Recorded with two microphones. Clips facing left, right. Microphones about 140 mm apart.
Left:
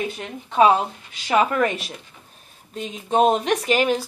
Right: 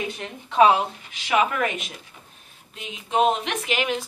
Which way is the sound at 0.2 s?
35° left (ahead or behind).